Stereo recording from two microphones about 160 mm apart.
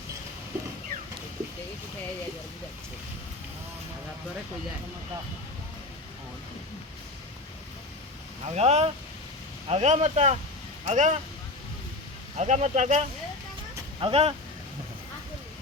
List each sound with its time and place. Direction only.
8.4 s speech: 45° right (ahead or behind)
12.4 s speech: 45° right (ahead or behind)